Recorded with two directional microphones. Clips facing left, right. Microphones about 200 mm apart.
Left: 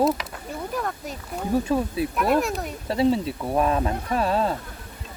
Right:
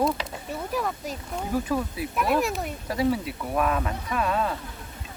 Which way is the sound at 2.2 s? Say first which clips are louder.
Left 1 dB; centre (ahead or behind).